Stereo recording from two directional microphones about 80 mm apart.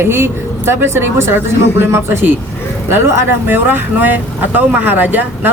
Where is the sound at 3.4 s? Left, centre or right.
Right.